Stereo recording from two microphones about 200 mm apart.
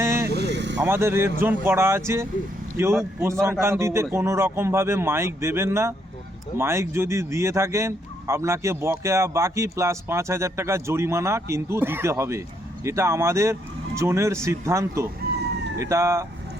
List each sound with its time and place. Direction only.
0.0 s vehicle: 15° right (ahead or behind)
0.3 s vehicle: 60° right (ahead or behind)
0.8 s speech: 15° right (ahead or behind)